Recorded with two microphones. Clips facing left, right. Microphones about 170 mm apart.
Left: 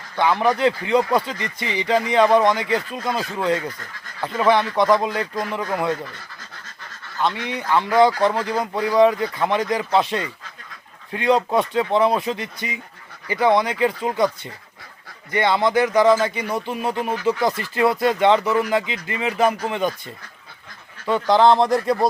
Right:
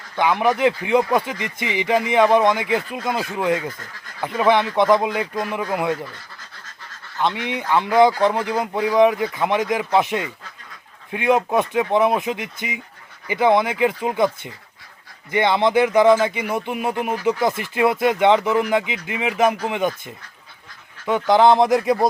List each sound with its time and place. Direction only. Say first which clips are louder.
0.2 s speech: even; 15° right (ahead or behind)
7.2 s speech: right 1 dB; 20° right (ahead or behind)